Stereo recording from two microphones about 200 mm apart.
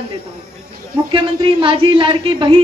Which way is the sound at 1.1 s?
25° right (ahead or behind).